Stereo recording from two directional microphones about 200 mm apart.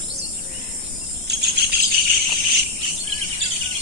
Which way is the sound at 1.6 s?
55° right (ahead or behind).